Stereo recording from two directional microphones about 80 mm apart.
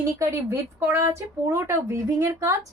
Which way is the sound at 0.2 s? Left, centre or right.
Right.